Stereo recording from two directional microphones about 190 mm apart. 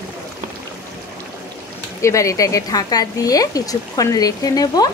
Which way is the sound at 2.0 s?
15° left (ahead or behind).